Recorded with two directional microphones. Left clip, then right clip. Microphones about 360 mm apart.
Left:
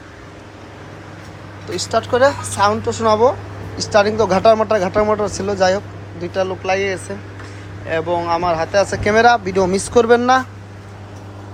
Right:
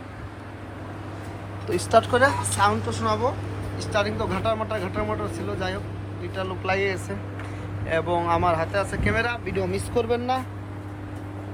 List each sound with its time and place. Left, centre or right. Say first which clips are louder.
1.7 s speech: left 2 dB; centre
9.6 s speech: left 11 dB; left